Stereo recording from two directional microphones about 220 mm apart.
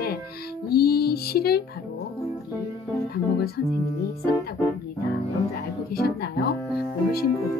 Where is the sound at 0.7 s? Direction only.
45° left (ahead or behind).